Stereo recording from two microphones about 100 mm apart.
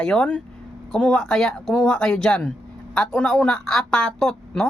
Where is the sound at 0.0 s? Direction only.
10° left (ahead or behind).